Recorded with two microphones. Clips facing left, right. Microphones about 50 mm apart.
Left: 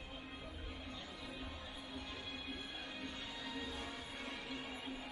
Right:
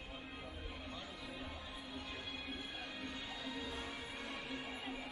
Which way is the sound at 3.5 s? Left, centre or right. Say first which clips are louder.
Left 1 dB; right.